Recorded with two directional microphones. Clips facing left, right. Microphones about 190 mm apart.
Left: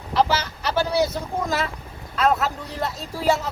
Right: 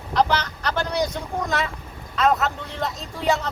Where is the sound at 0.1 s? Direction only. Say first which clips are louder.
Even; 5° left (ahead or behind).